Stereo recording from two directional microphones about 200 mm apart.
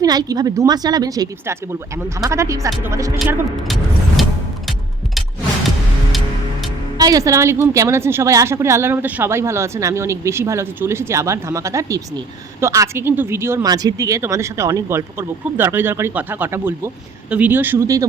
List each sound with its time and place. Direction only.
0.0 s a woman's voice: 20° right (ahead or behind)
3.2 s speech: centre (ahead or behind)
4.2 s music: centre (ahead or behind)
6.1 s music: centre (ahead or behind)
7.0 s a woman's voice: 15° right (ahead or behind)